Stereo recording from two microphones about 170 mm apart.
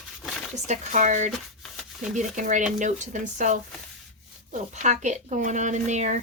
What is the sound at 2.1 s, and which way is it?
Speech, 45° right (ahead or behind).